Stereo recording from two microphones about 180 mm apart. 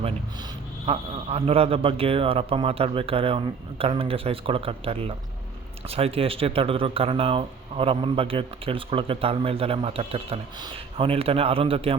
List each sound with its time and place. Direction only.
0.9 s speech: 30° right (ahead or behind)